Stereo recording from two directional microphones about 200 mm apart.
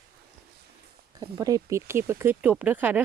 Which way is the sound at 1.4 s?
15° right (ahead or behind).